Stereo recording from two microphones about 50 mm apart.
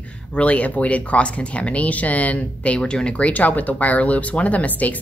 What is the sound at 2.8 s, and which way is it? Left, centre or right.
A woman's voice, centre.